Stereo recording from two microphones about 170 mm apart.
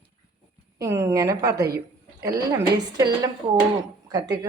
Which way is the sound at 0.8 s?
15° right (ahead or behind).